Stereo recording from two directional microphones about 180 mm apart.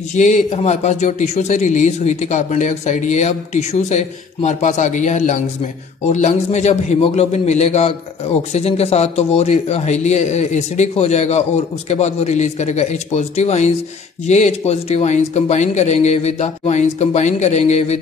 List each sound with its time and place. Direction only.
0.1 s a man's voice: 40° left (ahead or behind)